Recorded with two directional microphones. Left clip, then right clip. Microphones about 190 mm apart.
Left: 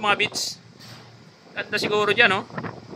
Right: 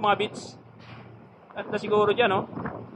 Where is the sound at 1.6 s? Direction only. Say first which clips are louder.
Left 1 dB; 20° left (ahead or behind).